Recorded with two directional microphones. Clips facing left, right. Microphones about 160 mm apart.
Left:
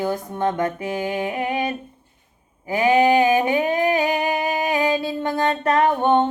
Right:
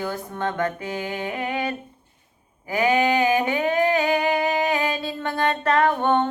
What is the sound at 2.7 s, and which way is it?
Humming, 20° left (ahead or behind).